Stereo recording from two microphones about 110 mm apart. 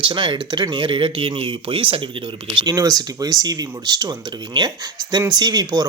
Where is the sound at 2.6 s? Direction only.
35° right (ahead or behind).